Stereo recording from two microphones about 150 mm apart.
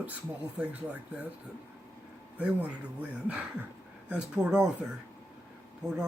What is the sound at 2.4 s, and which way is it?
Speech, 10° right (ahead or behind).